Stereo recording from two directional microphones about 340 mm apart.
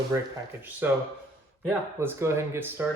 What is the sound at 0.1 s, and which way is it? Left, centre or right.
Speech, centre.